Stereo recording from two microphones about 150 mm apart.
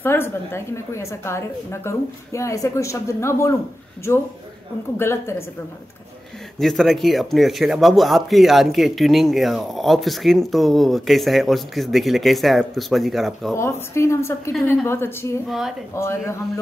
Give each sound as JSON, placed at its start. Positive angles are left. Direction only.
{"t": 0.0, "sound": "a woman's voice", "side_deg": 15}
{"t": 6.6, "sound": "speech", "side_deg": 0}
{"t": 13.6, "sound": "a woman's voice", "side_deg": 15}
{"t": 15.4, "sound": "speech", "side_deg": 0}
{"t": 15.9, "sound": "a woman's voice", "side_deg": 20}